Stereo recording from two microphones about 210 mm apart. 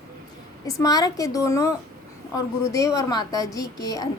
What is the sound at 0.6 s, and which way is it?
A woman's voice, 15° left (ahead or behind).